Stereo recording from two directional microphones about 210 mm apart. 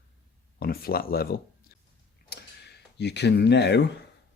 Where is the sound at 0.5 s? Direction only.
45° left (ahead or behind).